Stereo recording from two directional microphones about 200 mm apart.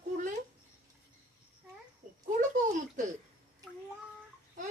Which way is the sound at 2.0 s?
40° right (ahead or behind).